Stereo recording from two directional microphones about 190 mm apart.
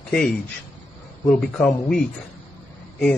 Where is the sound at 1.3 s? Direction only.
5° left (ahead or behind).